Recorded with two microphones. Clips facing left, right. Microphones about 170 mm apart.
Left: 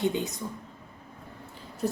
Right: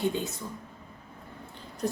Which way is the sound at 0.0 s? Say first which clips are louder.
Left 1 dB; 20° left (ahead or behind).